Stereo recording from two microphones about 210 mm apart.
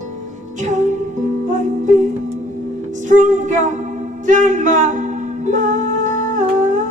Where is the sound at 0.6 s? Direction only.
35° right (ahead or behind).